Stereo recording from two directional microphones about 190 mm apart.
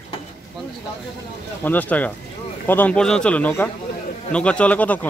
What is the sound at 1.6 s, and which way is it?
Speech, 10° left (ahead or behind).